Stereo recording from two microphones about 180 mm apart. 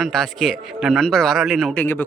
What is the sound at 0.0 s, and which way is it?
A man's voice, centre (ahead or behind).